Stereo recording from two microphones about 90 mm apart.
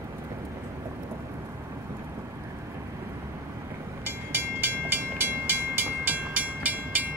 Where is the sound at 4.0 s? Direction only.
25° right (ahead or behind).